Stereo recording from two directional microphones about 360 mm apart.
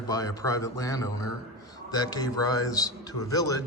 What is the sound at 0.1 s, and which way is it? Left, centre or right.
A man's voice, centre.